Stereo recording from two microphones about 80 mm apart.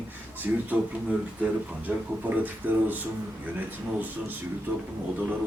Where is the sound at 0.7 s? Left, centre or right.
Right.